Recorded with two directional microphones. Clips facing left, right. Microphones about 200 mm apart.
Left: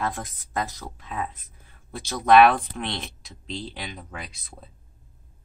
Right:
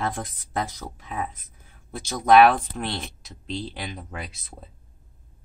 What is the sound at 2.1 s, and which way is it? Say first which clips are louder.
A woman's voice: even; centre (ahead or behind).